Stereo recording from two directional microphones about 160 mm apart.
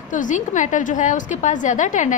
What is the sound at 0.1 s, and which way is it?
A woman's voice, 50° left (ahead or behind).